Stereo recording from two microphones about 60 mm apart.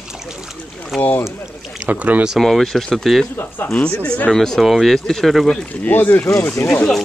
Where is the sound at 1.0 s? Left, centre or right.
Left.